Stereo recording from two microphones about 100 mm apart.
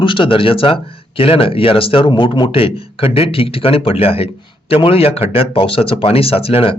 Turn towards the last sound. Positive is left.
turn(degrees=70)  # may be behind; listen again after turning